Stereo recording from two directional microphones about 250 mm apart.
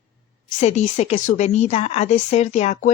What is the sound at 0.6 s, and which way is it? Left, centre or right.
A woman's voice, left.